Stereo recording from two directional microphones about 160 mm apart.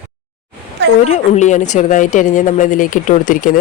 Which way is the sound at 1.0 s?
45° left (ahead or behind).